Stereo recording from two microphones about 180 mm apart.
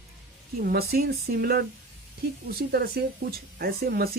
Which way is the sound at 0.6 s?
55° right (ahead or behind).